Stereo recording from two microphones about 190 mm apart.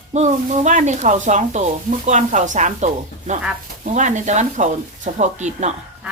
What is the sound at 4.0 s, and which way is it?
Speech, 40° right (ahead or behind).